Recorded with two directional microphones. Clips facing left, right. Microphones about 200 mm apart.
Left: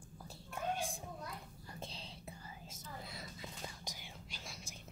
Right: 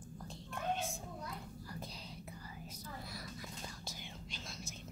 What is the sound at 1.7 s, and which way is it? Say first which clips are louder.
Whispering: left 2 dB; 25° left (ahead or behind).